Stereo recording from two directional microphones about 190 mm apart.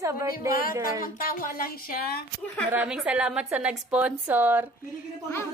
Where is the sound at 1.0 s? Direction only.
50° left (ahead or behind).